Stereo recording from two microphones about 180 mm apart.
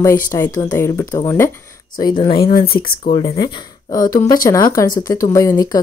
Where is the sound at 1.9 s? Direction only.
25° left (ahead or behind).